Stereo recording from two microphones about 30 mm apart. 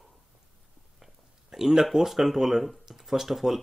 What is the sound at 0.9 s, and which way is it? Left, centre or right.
Speech, centre.